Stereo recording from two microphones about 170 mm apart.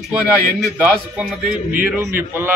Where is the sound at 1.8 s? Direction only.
10° right (ahead or behind).